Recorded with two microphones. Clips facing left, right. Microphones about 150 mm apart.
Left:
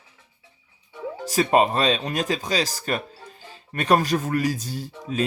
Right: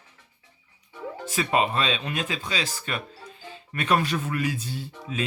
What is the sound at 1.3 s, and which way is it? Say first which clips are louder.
Speech: left 5 dB; 40° left (ahead or behind).